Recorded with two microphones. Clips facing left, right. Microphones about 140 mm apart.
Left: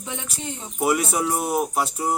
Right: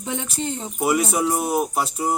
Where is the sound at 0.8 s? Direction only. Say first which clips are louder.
Right 1 dB; centre (ahead or behind).